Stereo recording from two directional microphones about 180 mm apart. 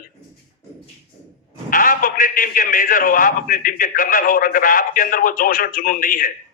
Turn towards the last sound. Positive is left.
turn(degrees=50)  # may be behind; listen again after turning